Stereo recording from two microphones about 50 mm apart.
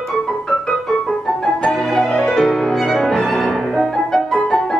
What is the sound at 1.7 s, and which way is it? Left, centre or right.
Music, centre.